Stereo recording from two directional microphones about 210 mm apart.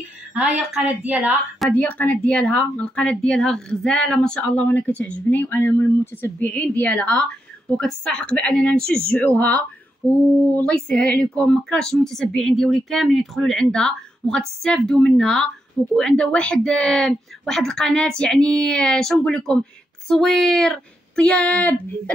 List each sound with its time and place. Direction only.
0.3 s a woman's voice: 5° right (ahead or behind)
1.7 s a woman's voice: 10° left (ahead or behind)